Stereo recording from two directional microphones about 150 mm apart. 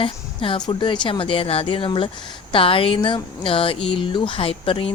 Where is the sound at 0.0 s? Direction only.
35° left (ahead or behind).